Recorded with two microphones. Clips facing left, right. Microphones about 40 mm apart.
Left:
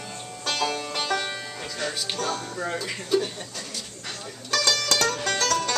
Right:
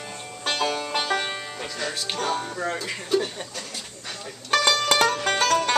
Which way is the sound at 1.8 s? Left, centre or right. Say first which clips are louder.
Even; centre.